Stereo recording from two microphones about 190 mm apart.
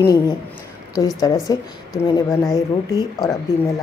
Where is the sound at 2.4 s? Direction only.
20° left (ahead or behind).